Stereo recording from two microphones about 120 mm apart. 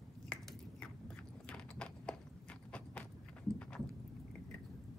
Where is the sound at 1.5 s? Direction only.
10° left (ahead or behind).